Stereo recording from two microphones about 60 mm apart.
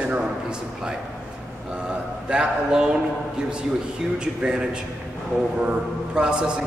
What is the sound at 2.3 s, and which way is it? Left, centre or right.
Speech, centre.